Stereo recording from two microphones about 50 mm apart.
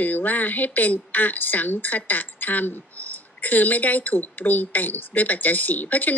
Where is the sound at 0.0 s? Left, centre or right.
Left.